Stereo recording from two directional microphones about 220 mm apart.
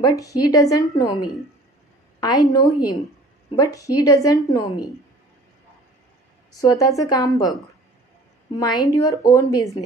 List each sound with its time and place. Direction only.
0.0 s a woman's voice: 15° left (ahead or behind)
6.5 s a woman's voice: 15° left (ahead or behind)
8.5 s a woman's voice: 15° left (ahead or behind)